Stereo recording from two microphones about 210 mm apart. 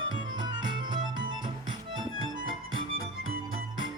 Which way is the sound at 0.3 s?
20° right (ahead or behind).